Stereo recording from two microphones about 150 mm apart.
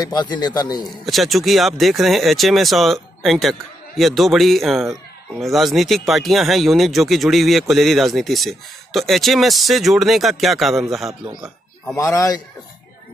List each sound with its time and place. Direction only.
0.0 s a man's voice: 30° left (ahead or behind)
1.0 s speech: centre (ahead or behind)
11.9 s a man's voice: 20° left (ahead or behind)